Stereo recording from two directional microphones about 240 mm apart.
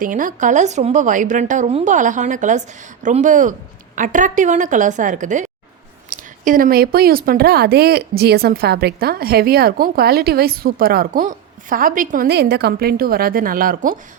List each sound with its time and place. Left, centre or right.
0.0 s a woman's voice: right